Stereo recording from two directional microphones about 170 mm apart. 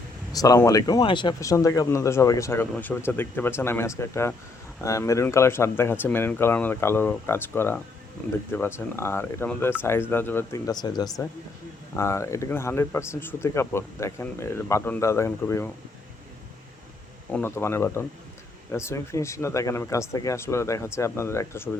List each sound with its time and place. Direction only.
0.3 s speech: 20° left (ahead or behind)
17.3 s speech: 15° left (ahead or behind)